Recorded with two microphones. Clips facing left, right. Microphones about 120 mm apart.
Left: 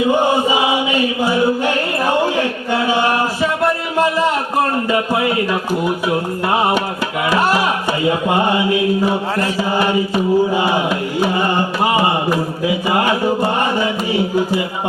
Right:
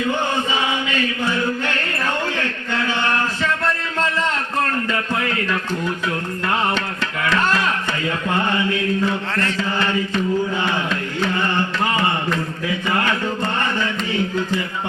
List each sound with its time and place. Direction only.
0.0 s chant: 10° left (ahead or behind)
6.1 s mantra: 15° left (ahead or behind)